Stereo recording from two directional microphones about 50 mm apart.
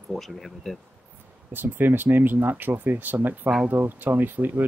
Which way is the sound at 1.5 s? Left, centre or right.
Right.